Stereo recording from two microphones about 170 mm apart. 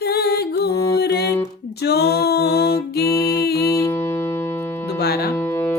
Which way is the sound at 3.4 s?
65° left (ahead or behind).